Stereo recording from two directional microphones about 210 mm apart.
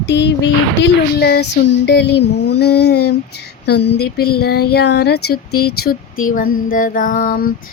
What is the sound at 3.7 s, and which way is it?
Speech, 55° left (ahead or behind).